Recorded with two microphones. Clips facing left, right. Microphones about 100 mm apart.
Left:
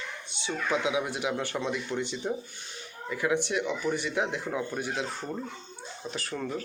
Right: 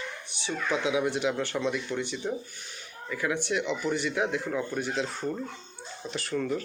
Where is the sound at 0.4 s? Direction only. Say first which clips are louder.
Even; 20° left (ahead or behind).